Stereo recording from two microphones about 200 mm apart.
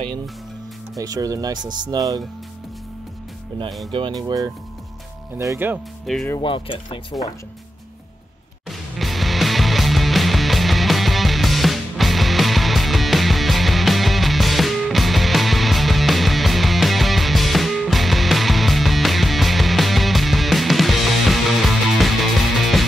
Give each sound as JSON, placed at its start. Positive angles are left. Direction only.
{"t": 0.9, "sound": "speech", "side_deg": -20}
{"t": 3.9, "sound": "speech", "side_deg": -25}
{"t": 5.4, "sound": "speech", "side_deg": -15}
{"t": 6.0, "sound": "speech", "side_deg": 0}
{"t": 6.4, "sound": "speech", "side_deg": 25}
{"t": 8.6, "sound": "music", "side_deg": 0}